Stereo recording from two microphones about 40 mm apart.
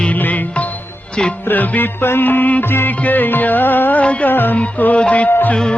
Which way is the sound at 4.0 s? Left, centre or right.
Left.